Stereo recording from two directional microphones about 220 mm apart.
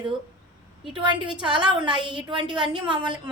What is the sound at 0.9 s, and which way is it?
A woman's voice, 20° right (ahead or behind).